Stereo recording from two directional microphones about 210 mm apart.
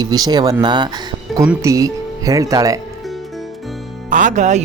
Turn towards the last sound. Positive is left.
turn(degrees=-35)  # may be behind; listen again after turning